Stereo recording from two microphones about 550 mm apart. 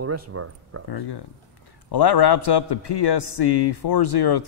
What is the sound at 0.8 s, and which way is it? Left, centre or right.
A man's voice, left.